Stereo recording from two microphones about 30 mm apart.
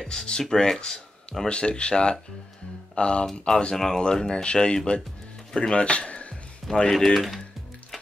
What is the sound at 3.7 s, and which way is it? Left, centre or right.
Speech, centre.